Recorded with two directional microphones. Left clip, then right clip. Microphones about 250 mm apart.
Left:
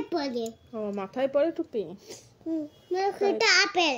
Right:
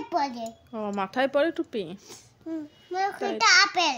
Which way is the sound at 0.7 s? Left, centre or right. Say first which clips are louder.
Right 3 dB; right.